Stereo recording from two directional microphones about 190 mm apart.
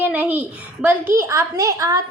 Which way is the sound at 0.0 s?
5° right (ahead or behind).